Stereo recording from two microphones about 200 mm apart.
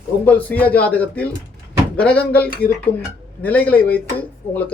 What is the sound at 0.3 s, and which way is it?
Speech, 10° left (ahead or behind).